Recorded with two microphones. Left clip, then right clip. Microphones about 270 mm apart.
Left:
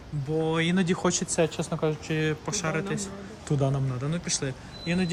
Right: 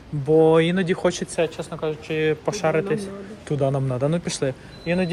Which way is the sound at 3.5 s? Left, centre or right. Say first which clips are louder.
Right 6 dB; centre.